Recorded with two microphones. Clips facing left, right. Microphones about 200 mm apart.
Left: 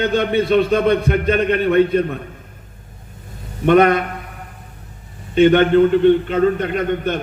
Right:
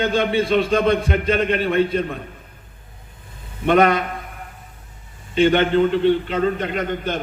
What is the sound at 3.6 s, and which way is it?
Speech, 50° left (ahead or behind).